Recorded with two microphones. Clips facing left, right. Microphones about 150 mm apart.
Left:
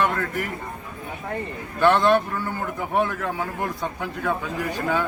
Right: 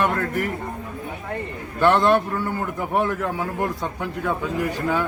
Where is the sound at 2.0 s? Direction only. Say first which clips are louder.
Right 1 dB; 25° right (ahead or behind).